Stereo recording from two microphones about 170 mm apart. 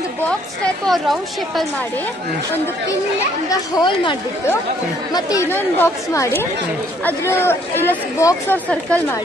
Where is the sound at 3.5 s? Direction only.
25° left (ahead or behind); by 9.2 s 10° left (ahead or behind).